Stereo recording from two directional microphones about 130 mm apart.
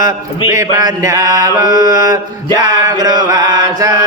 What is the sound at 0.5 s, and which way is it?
Mantra, 25° right (ahead or behind).